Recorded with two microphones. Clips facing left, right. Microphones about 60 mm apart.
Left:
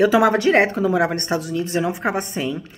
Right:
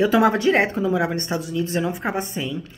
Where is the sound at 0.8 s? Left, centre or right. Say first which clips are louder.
Left 3 dB; left.